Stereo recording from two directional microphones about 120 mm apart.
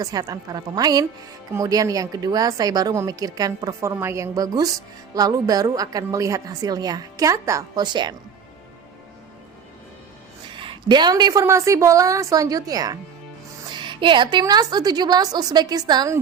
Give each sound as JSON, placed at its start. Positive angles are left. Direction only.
{"t": 0.0, "sound": "a woman's voice", "side_deg": -30}
{"t": 10.6, "sound": "a woman's voice", "side_deg": -40}